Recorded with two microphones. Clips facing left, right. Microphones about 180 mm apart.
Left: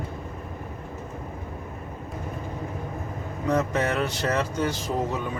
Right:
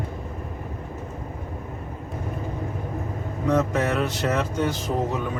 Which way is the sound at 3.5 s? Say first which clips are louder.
Right 2 dB; 5° right (ahead or behind).